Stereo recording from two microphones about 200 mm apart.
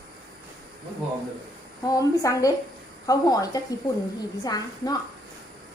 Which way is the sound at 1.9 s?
15° left (ahead or behind).